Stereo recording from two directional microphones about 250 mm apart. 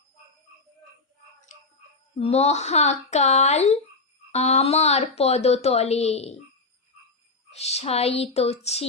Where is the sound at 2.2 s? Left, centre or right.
Left.